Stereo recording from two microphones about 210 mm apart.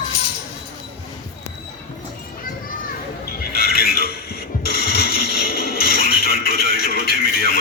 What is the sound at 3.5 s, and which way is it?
Mechanisms, 45° left (ahead or behind).